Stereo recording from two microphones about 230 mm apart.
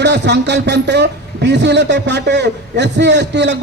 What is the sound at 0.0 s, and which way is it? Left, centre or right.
A man's voice, right.